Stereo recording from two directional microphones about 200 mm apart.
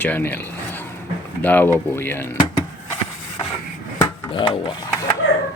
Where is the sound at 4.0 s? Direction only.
25° left (ahead or behind).